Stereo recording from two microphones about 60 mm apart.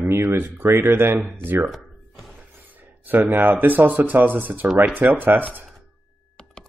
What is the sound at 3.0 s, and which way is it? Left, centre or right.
Speech, right.